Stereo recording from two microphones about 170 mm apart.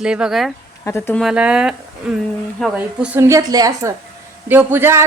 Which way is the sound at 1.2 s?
5° right (ahead or behind).